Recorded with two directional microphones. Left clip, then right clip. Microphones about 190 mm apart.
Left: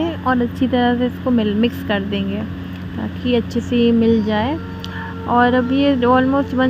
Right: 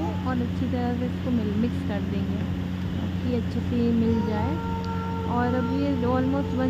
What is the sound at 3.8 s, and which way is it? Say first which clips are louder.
Speech: left 10 dB; 25° left (ahead or behind).